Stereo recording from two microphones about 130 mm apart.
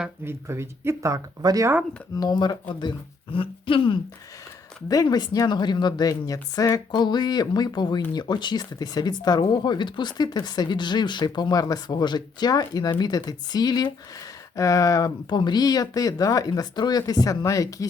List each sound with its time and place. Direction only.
0.3 s speech: 20° right (ahead or behind)
2.1 s speech: 30° left (ahead or behind)
4.9 s speech: 30° left (ahead or behind)